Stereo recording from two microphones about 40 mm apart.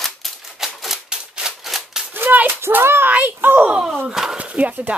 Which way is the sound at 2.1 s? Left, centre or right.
Right.